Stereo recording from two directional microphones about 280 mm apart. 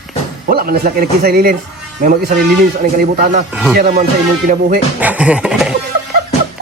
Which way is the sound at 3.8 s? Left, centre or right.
Right.